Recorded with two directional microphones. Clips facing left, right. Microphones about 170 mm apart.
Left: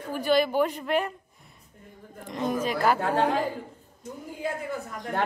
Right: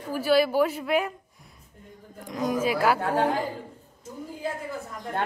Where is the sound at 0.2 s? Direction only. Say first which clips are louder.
Right 2 dB; 5° right (ahead or behind).